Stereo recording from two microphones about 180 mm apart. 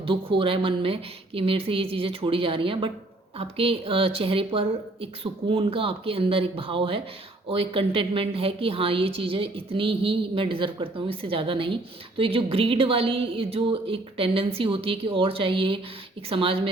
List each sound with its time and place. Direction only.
0.0 s a woman's voice: 30° right (ahead or behind)